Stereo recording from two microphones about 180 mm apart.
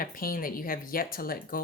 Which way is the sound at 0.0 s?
50° left (ahead or behind).